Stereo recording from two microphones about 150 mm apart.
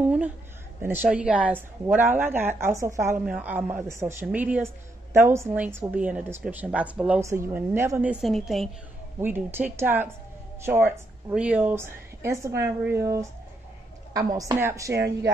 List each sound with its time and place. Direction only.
0.0 s a sound: 10° right (ahead or behind)
1.0 s speech: 10° right (ahead or behind)
7.2 s a woman's voice: 20° right (ahead or behind)
8.1 s a woman's voice: centre (ahead or behind)
9.2 s a woman's voice: 15° right (ahead or behind)